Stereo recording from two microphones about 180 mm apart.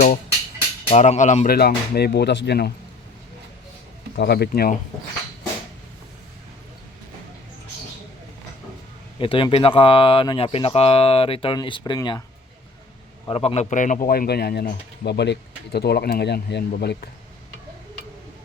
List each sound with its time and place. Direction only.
0.9 s speech: 40° left (ahead or behind)
1.5 s speech: 60° left (ahead or behind)
4.2 s speech: 65° left (ahead or behind)
9.1 s speech: 30° left (ahead or behind)
13.2 s speech: 30° left (ahead or behind); by 17.1 s 60° left (ahead or behind)